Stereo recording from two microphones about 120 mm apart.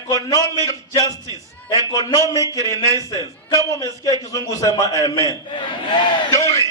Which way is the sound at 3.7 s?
30° left (ahead or behind).